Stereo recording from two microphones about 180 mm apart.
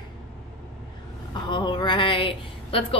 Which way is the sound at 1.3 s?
25° left (ahead or behind).